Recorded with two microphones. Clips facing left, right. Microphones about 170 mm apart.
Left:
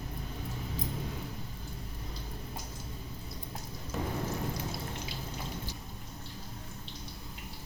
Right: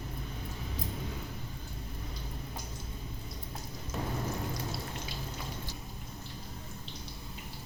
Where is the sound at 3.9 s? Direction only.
Centre (ahead or behind).